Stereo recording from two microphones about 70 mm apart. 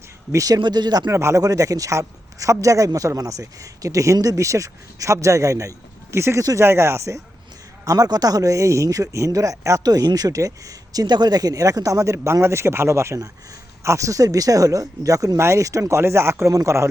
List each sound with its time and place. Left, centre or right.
0.3 s speech: right
1.1 s speech: right
7.9 s speech: right
16.5 s speech: right